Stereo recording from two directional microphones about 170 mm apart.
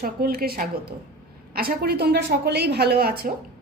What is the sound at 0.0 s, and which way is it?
A woman's voice, 60° right (ahead or behind).